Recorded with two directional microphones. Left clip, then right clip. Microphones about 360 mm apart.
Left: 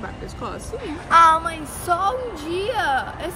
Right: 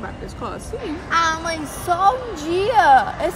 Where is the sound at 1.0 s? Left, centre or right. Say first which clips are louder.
Left 6 dB; centre.